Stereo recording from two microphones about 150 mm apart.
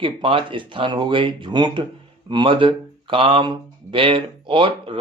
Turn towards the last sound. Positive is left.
turn(degrees=-35)  # may be behind; listen again after turning